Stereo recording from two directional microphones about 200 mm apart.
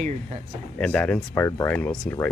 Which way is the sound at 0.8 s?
5° left (ahead or behind).